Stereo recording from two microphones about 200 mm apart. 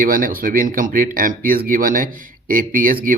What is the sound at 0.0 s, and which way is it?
A man's voice, 45° right (ahead or behind).